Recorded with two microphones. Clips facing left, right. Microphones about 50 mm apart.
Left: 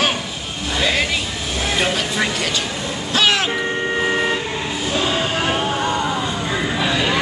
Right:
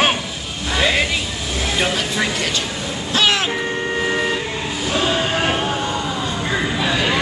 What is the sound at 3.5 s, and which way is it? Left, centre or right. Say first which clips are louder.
Vehicle: left 1 dB; centre.